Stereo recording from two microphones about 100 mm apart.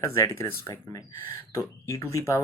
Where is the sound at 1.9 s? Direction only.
30° left (ahead or behind).